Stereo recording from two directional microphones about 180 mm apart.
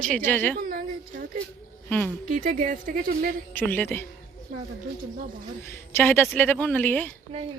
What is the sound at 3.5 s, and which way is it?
Speech, 10° left (ahead or behind).